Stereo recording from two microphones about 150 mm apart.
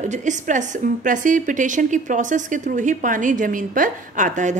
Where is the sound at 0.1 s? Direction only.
55° right (ahead or behind).